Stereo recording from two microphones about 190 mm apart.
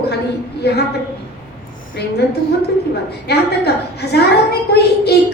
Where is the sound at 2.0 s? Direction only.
60° left (ahead or behind).